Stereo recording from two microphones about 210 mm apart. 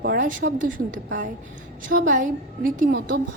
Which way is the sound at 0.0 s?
50° right (ahead or behind).